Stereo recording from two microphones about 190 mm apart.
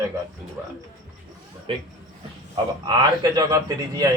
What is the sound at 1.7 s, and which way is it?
Speech, 30° right (ahead or behind).